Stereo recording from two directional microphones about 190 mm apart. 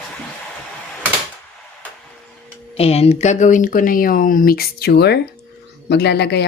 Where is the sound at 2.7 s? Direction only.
30° left (ahead or behind).